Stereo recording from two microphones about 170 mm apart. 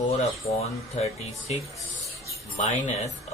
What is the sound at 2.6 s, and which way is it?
Speech, 45° left (ahead or behind).